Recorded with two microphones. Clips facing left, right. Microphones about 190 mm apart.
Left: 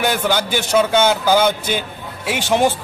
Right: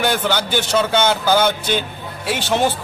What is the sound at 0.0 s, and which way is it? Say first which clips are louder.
A man's voice: left 1 dB; 10° left (ahead or behind).